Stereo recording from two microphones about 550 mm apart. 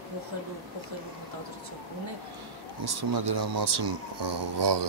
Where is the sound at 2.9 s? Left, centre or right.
Right.